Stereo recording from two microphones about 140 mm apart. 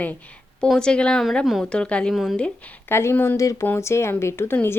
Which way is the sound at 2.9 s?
20° left (ahead or behind).